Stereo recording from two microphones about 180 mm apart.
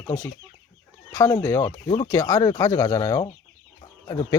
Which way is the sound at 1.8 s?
30° left (ahead or behind).